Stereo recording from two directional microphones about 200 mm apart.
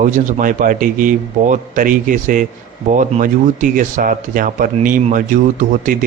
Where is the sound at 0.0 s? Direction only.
40° right (ahead or behind).